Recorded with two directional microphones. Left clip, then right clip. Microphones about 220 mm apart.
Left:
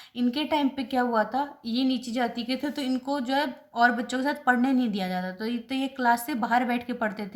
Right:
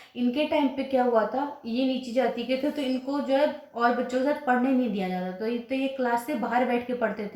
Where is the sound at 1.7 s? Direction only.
35° left (ahead or behind).